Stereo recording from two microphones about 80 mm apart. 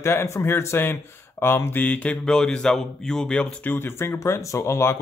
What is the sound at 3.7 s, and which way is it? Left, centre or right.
Speech, left.